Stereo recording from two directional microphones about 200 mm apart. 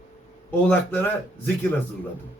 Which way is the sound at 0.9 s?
10° left (ahead or behind).